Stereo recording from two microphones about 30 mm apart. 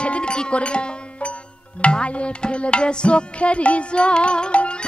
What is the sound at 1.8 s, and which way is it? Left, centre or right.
Tabla, left.